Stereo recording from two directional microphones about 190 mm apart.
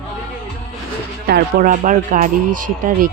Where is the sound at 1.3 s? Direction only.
50° right (ahead or behind).